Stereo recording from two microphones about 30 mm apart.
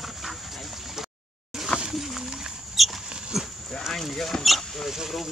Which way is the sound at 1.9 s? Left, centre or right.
Centre.